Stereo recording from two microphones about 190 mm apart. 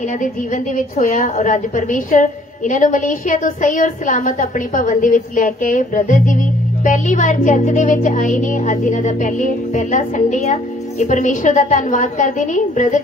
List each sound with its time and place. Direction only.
0.2 s a woman's voice: 40° left (ahead or behind)